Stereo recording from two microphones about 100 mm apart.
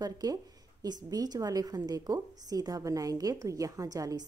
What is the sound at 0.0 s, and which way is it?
A woman's voice, 40° right (ahead or behind).